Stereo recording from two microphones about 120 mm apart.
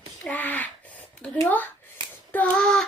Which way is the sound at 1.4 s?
15° left (ahead or behind).